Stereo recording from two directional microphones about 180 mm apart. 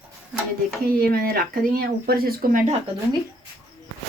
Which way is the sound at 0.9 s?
55° right (ahead or behind).